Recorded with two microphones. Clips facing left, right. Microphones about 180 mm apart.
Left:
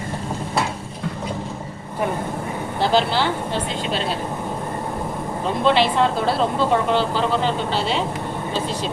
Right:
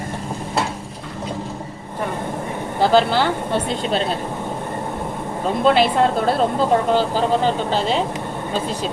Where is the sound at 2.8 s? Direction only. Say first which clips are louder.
Right 4 dB; 50° right (ahead or behind).